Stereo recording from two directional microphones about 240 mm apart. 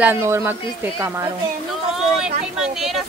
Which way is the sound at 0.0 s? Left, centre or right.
Centre.